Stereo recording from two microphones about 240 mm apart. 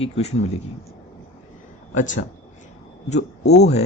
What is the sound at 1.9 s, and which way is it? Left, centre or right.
Speech, left.